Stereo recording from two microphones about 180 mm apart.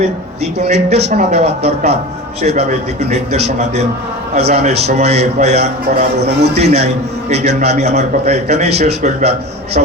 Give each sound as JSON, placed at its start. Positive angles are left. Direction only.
{"t": 0.6, "sound": "a man's voice", "side_deg": -40}